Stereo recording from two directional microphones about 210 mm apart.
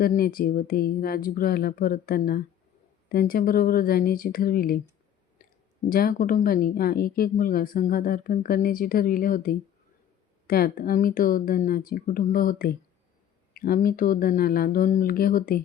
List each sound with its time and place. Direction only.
0.0 s a woman's voice: 45° left (ahead or behind)
5.9 s a woman's voice: 45° left (ahead or behind)